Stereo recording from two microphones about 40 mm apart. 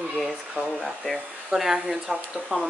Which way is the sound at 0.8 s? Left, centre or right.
Centre.